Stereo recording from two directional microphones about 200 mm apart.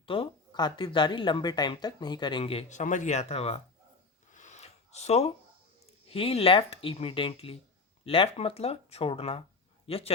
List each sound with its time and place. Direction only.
0.0 s speech: 25° left (ahead or behind)
4.3 s a sound: 40° left (ahead or behind)
6.1 s speech: 30° left (ahead or behind)